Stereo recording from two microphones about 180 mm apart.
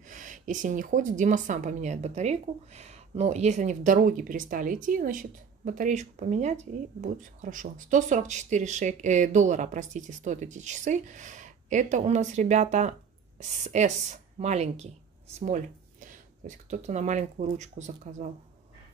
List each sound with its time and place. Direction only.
0.1 s a woman's voice: 45° right (ahead or behind)